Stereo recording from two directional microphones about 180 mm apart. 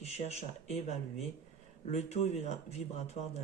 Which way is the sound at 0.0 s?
35° left (ahead or behind).